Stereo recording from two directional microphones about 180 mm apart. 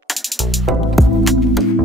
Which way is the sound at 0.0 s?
Centre (ahead or behind).